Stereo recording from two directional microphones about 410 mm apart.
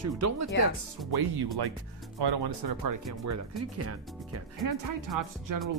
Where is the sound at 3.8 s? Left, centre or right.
Right.